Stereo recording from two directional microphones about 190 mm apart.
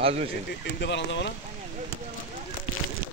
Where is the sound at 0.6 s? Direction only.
65° left (ahead or behind).